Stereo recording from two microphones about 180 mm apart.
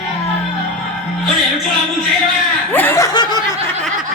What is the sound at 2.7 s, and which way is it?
Chuckle, 10° left (ahead or behind).